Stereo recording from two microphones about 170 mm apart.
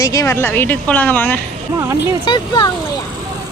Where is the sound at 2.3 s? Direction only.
25° left (ahead or behind).